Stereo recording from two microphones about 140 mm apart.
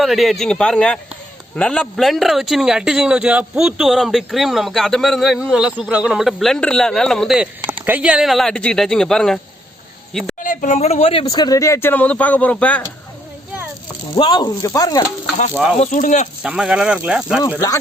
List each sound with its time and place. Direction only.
0.0 s a man's voice: centre (ahead or behind)
10.4 s speech: 70° left (ahead or behind); by 11.3 s 40° left (ahead or behind)
11.3 s speech: 25° left (ahead or behind); by 12.8 s 10° left (ahead or behind)
14.2 s speech: 30° left (ahead or behind)
15.8 s speech: 65° left (ahead or behind)
16.4 s speech: 5° right (ahead or behind)